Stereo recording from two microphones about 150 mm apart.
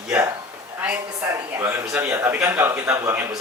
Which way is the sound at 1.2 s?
20° right (ahead or behind).